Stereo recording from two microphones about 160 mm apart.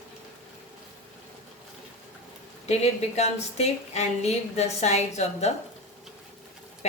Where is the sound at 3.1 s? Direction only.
45° left (ahead or behind).